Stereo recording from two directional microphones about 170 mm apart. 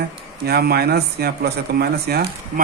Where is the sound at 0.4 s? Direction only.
70° right (ahead or behind).